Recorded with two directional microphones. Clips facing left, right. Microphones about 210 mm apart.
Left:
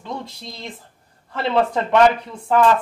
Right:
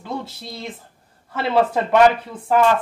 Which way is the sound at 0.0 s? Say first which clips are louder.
Right 2 dB; 5° right (ahead or behind).